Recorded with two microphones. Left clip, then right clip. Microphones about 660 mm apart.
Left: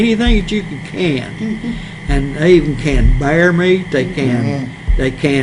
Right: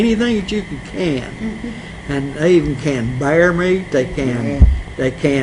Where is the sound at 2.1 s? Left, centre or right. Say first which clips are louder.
Left 3 dB; left.